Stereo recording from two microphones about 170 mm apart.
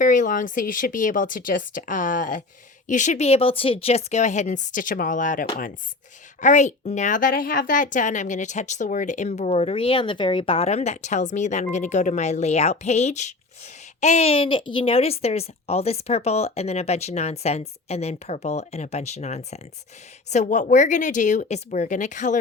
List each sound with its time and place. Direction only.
0.0 s a woman's voice: 50° left (ahead or behind)